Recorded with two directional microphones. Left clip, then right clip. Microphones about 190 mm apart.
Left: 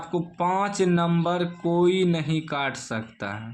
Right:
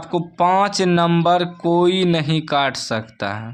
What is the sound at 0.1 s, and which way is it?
Speech, 35° right (ahead or behind).